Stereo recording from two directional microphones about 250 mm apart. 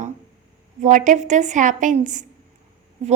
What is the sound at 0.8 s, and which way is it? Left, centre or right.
A woman's voice, right.